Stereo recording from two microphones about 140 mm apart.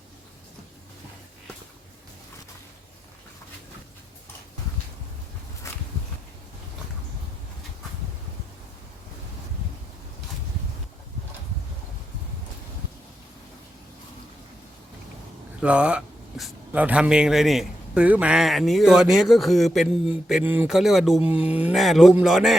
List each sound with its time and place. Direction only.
5.7 s a sound: 20° left (ahead or behind)
15.6 s speech: 10° right (ahead or behind)
20.4 s speech: 15° right (ahead or behind)
20.7 s speech: 5° right (ahead or behind)